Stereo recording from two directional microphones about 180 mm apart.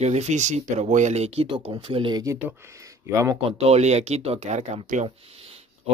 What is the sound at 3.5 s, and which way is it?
Speech, 35° right (ahead or behind).